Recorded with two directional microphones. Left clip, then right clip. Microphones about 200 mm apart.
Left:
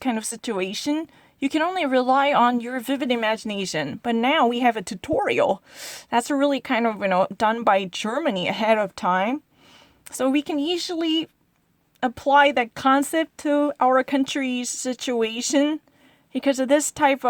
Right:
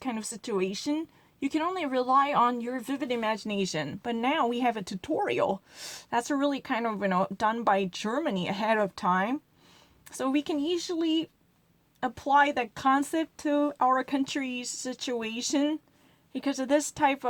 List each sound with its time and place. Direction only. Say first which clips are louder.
0.0 s speech: left 8 dB; 45° left (ahead or behind)